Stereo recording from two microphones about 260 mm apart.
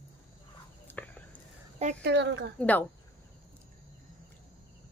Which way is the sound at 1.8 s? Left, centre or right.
Right.